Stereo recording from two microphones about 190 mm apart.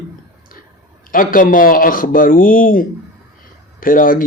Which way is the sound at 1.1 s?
45° left (ahead or behind).